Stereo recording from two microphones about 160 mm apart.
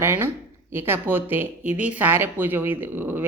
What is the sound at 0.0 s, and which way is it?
Speech, 15° right (ahead or behind).